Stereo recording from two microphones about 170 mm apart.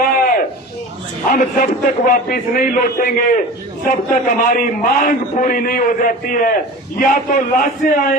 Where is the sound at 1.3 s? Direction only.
55° left (ahead or behind).